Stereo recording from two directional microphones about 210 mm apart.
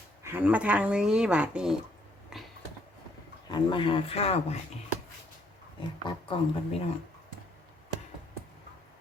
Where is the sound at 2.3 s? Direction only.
Centre (ahead or behind).